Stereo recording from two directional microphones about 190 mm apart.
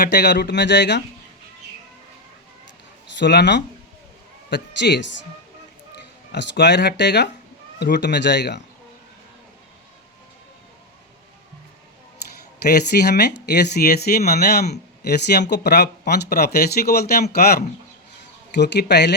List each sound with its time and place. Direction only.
0.0 s speech: 60° left (ahead or behind)
3.2 s speech: 65° left (ahead or behind)
6.3 s speech: 65° left (ahead or behind)
12.6 s speech: 60° left (ahead or behind)